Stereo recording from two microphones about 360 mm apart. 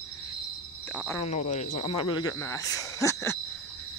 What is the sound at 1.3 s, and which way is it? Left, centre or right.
Speech, centre.